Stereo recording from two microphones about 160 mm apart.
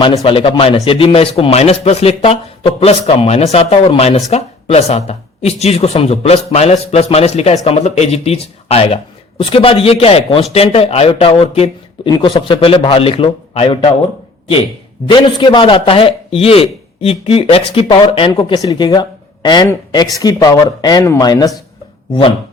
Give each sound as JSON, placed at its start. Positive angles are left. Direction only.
{"t": 0.3, "sound": "a man's voice", "side_deg": 35}
{"t": 15.0, "sound": "a man's voice", "side_deg": 30}